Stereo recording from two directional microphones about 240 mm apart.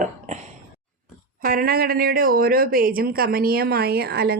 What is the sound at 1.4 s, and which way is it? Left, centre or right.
Speech, right.